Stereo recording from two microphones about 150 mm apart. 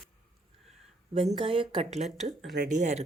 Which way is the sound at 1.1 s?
40° right (ahead or behind).